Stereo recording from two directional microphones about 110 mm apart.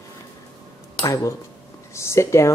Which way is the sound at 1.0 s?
30° left (ahead or behind).